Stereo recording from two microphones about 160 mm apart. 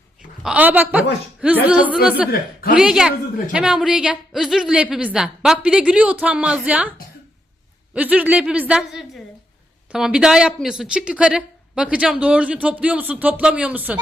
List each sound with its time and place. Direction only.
0.4 s a woman's voice: 10° right (ahead or behind)
2.3 s a man's voice: 65° left (ahead or behind)
2.7 s a woman's voice: 5° right (ahead or behind)
7.9 s a woman's voice: 10° right (ahead or behind)